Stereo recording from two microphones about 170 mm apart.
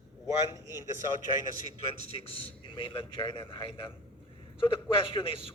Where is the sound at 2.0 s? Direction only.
35° left (ahead or behind).